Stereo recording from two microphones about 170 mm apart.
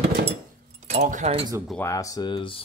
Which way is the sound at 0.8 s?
45° right (ahead or behind).